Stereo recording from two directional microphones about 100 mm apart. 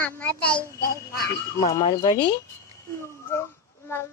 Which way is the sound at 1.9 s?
45° left (ahead or behind).